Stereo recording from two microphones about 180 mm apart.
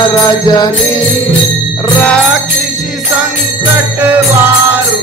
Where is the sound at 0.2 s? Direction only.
25° left (ahead or behind).